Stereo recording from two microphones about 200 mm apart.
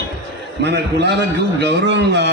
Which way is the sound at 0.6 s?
60° right (ahead or behind).